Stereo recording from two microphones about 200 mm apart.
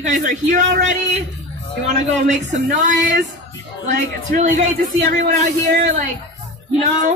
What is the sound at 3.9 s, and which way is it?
Speech, 40° right (ahead or behind).